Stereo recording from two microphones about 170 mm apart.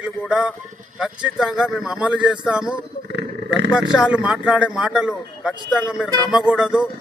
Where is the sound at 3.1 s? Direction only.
80° right.